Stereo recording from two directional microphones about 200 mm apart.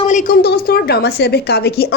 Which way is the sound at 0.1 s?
40° left (ahead or behind).